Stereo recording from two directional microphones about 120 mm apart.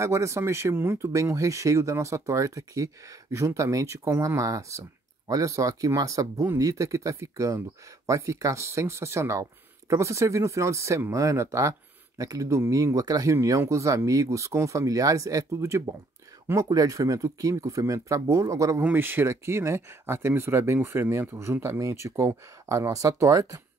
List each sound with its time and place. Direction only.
0.0 s speech: 25° right (ahead or behind)